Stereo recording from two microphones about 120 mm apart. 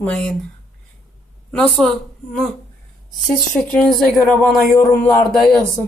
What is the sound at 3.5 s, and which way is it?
Speech, 10° left (ahead or behind).